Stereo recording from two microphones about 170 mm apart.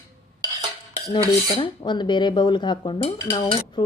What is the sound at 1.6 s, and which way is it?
Speech, 25° left (ahead or behind).